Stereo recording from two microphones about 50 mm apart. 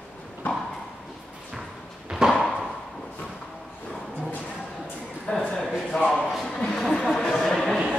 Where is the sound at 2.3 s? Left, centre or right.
Centre.